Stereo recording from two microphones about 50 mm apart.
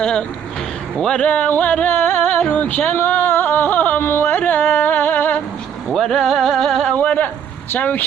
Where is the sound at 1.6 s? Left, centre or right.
Left.